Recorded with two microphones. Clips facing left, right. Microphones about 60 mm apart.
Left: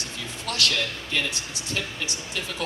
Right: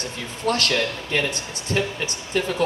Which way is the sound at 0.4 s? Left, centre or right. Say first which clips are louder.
Right 6 dB; right.